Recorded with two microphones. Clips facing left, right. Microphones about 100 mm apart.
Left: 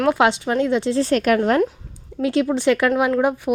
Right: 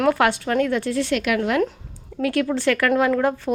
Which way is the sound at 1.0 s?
40° left (ahead or behind).